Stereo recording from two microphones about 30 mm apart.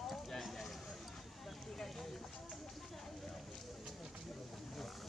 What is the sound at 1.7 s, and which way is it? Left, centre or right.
Run, centre.